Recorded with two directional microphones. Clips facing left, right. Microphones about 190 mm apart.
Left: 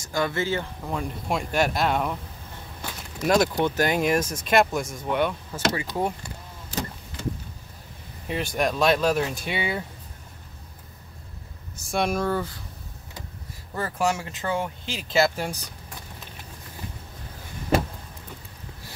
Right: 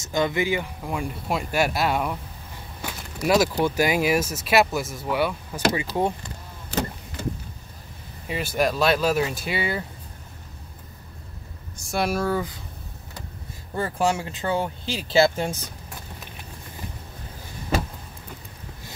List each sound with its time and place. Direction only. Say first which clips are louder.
0.0 s speech: right 3 dB; 20° right (ahead or behind)
5.9 s speech: right 3 dB; 25° right (ahead or behind)
8.3 s speech: right 2 dB; 5° right (ahead or behind)
11.8 s speech: even; centre (ahead or behind)
13.7 s speech: right 2 dB; 25° right (ahead or behind)